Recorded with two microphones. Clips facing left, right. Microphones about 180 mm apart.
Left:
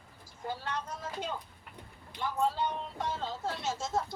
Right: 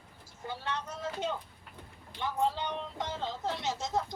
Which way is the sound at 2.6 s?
75° right (ahead or behind).